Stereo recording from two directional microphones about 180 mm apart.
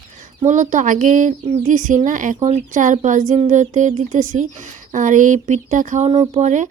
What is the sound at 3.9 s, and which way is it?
Speech, 40° right (ahead or behind).